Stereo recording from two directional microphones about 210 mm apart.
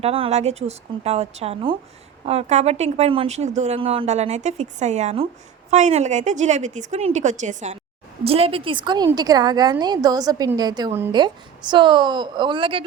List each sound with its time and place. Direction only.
0.0 s a woman's voice: 30° right (ahead or behind)